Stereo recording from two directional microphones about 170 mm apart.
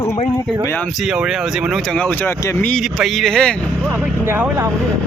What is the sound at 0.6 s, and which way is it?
Speech, 10° left (ahead or behind).